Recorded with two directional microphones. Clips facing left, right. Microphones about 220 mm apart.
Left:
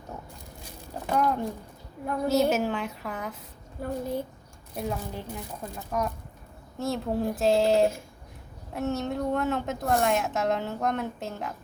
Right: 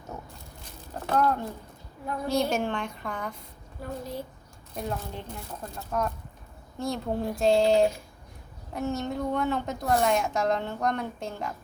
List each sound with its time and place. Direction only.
1.0 s a woman's voice: 15° left (ahead or behind)
3.8 s a woman's voice: 50° left (ahead or behind)
4.7 s a woman's voice: 5° left (ahead or behind)